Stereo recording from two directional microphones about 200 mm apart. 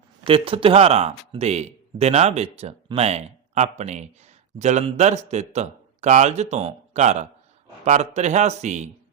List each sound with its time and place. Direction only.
0.3 s speech: 25° right (ahead or behind)